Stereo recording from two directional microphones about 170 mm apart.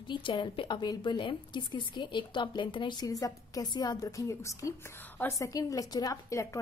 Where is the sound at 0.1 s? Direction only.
30° left (ahead or behind).